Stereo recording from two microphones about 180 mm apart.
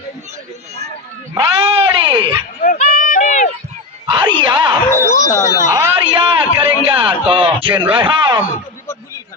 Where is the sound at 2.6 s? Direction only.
50° left (ahead or behind).